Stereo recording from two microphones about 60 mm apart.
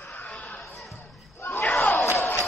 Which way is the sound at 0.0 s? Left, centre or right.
Left.